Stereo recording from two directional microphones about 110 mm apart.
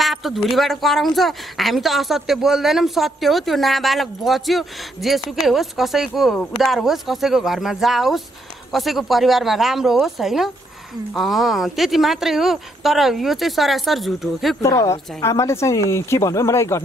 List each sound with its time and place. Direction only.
0.0 s speech: centre (ahead or behind)
14.6 s speech: 30° left (ahead or behind)